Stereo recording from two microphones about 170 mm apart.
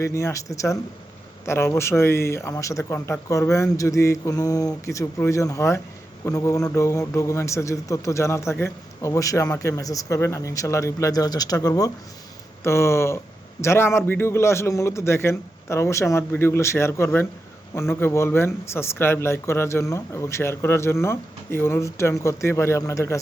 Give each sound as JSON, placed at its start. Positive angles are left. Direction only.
{"t": 0.0, "sound": "a man's voice", "side_deg": 15}